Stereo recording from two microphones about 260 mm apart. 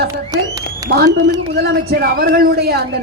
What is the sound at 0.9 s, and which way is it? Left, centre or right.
A woman's voice, right.